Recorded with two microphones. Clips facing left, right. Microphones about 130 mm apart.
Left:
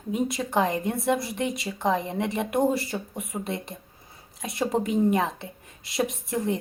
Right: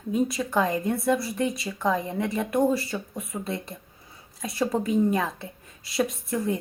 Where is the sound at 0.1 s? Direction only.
20° left (ahead or behind).